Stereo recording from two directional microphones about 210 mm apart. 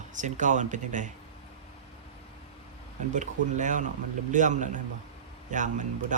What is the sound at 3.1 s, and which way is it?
Speech, 35° right (ahead or behind).